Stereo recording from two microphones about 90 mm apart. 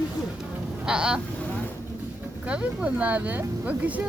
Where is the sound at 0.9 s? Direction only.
10° right (ahead or behind).